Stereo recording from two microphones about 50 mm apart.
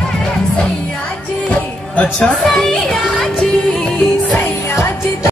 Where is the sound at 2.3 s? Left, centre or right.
Centre.